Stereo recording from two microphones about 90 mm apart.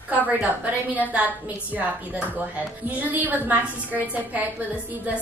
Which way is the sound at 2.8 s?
20° right (ahead or behind).